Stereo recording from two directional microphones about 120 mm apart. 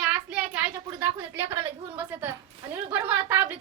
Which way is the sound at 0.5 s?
20° right (ahead or behind).